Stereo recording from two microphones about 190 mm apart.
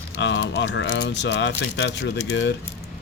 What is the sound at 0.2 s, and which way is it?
Speech, 70° left (ahead or behind).